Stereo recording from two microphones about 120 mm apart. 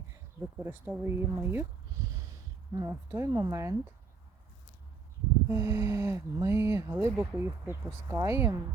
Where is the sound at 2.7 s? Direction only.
30° right (ahead or behind).